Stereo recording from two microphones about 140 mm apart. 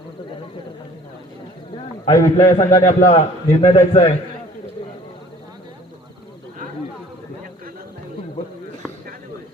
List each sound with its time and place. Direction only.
2.0 s a man's voice: 25° left (ahead or behind)
2.8 s a man's voice: 50° left (ahead or behind)